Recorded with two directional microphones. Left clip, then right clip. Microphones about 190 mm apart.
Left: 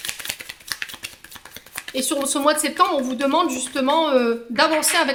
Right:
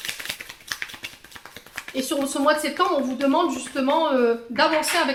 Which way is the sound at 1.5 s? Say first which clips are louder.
Left 2 dB; 35° left (ahead or behind).